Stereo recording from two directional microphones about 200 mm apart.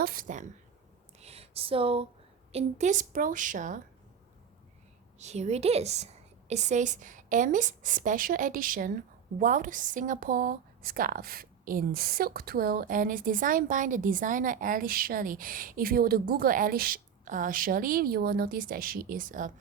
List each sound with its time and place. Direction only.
0.0 s a woman's voice: 45° right (ahead or behind)
1.2 s a sound: 30° right (ahead or behind)
2.5 s a woman's voice: 35° right (ahead or behind)
5.2 s a woman's voice: 35° right (ahead or behind)